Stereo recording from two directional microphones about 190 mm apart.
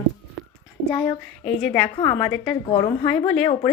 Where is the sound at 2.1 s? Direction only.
5° left (ahead or behind).